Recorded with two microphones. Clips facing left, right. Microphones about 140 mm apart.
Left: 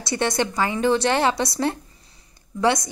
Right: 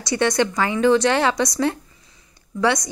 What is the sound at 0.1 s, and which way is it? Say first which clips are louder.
Speech: right 3 dB; 25° left (ahead or behind).